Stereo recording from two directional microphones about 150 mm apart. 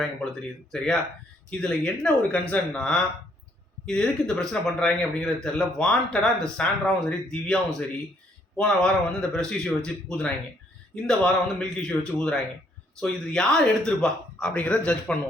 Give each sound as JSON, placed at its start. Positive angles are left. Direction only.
{"t": 0.7, "sound": "a man's voice", "side_deg": 5}